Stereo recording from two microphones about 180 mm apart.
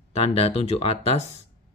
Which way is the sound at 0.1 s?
35° left (ahead or behind).